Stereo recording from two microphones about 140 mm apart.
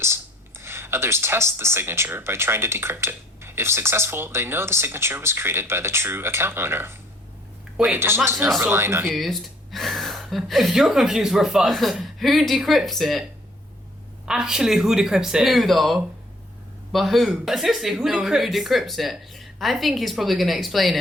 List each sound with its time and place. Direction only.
0.6 s speech: 15° right (ahead or behind)
7.9 s speech: 15° right (ahead or behind)
9.1 s speech: centre (ahead or behind)
14.3 s speech: 5° right (ahead or behind)